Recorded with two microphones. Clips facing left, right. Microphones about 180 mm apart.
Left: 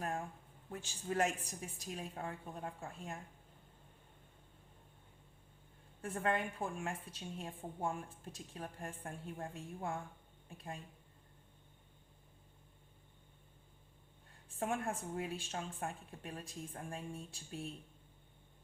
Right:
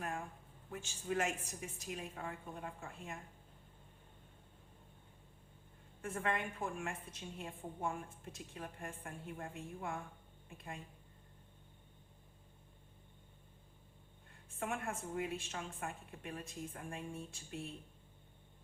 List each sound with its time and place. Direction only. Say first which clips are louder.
0.7 s a woman's voice: even; 35° left (ahead or behind)
6.0 s a woman's voice: left 2 dB; 35° left (ahead or behind)
14.6 s a woman's voice: left 3 dB; 35° left (ahead or behind)